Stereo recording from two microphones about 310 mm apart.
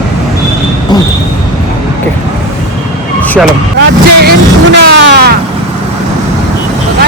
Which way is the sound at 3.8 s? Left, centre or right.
Right.